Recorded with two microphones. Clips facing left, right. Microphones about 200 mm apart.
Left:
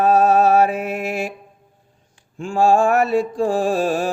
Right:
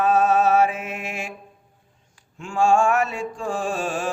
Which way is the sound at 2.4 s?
35° left (ahead or behind).